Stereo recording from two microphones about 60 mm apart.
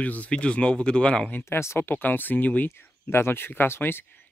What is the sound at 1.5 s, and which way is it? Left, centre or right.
Speech, left.